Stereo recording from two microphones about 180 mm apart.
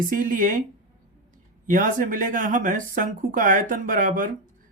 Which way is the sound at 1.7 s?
45° right (ahead or behind).